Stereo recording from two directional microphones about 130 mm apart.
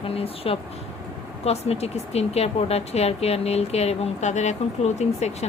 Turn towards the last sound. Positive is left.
turn(degrees=55)  # may be behind; listen again after turning